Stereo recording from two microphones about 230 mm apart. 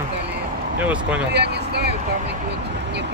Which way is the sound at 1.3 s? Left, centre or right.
Right.